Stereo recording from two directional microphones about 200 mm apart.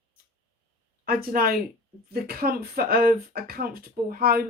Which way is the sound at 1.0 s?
45° right (ahead or behind).